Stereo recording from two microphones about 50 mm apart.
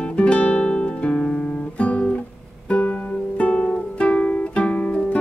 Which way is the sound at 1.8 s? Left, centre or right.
Left.